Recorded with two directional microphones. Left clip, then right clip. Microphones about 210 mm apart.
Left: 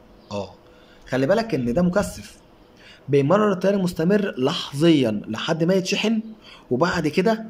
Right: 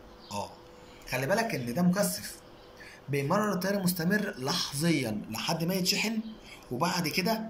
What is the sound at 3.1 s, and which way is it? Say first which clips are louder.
Speech: left 11 dB; 50° left (ahead or behind).